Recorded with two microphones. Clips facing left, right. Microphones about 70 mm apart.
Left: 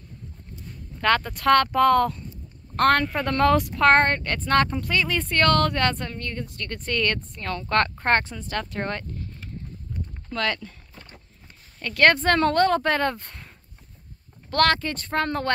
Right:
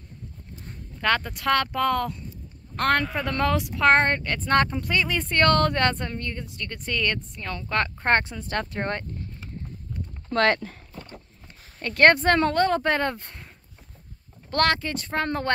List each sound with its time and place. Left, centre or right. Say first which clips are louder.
1.0 s a woman's voice: left 3 dB; centre
4.6 s speech: left 1 dB; centre
8.0 s speech: even; centre
10.3 s speech: right 5 dB; right
11.8 s speech: right 1 dB; right
12.2 s a woman's voice: left 1 dB; centre
14.5 s a woman's voice: left 2 dB; centre